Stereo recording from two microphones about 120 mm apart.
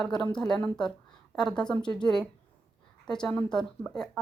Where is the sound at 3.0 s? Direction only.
5° left (ahead or behind).